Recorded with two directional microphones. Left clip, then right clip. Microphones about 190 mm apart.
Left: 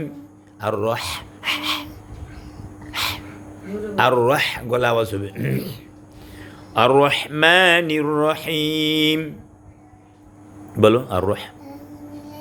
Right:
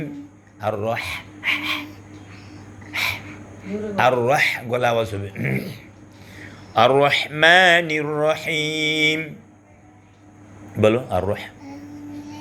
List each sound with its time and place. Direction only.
0.6 s speech: 45° left (ahead or behind)
2.9 s a sound: 40° left (ahead or behind)
3.9 s speech: 35° left (ahead or behind)
6.3 s speech: 30° left (ahead or behind)
10.8 s speech: 40° left (ahead or behind)